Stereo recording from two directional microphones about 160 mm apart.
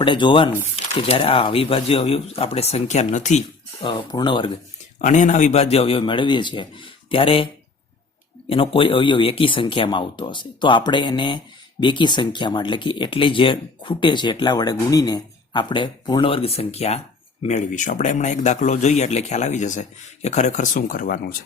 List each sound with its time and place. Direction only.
0.0 s speech: 30° left (ahead or behind); by 3.4 s 45° left (ahead or behind)
3.8 s speech: 30° left (ahead or behind)
4.9 s speech: 50° left (ahead or behind); by 7.4 s 35° left (ahead or behind)
8.4 s a man's voice: 35° left (ahead or behind); by 21.3 s 60° left (ahead or behind)